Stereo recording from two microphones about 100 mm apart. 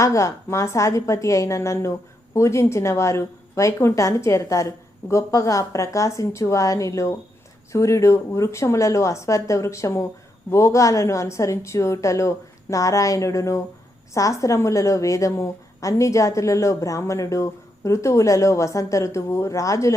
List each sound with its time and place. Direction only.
0.0 s a woman's voice: 30° left (ahead or behind)